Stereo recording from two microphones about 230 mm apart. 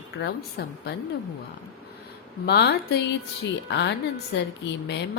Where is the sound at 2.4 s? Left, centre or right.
Left.